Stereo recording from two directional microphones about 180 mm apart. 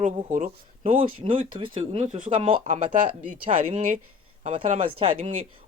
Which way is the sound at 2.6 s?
45° right (ahead or behind).